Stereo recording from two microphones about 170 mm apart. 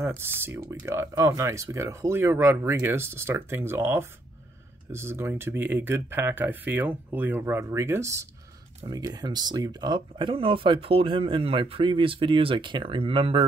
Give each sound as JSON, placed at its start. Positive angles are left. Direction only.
{"t": 0.2, "sound": "speech", "side_deg": -15}